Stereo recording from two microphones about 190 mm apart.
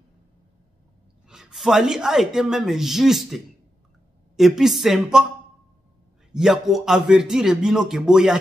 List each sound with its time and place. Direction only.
1.3 s speech: centre (ahead or behind)
6.3 s speech: centre (ahead or behind)